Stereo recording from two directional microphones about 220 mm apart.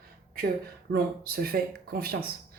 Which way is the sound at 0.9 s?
45° right (ahead or behind).